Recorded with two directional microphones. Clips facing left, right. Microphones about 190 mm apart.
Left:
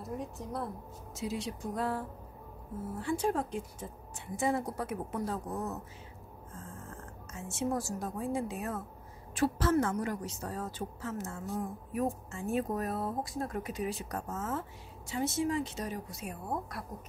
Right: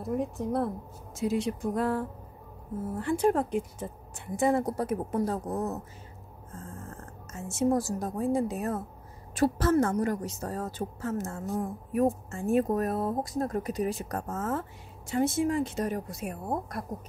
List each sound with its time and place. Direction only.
1.1 s speech: 55° right (ahead or behind)
3.0 s speech: 60° right (ahead or behind); by 5.8 s 40° right (ahead or behind)
6.9 s speech: 45° right (ahead or behind)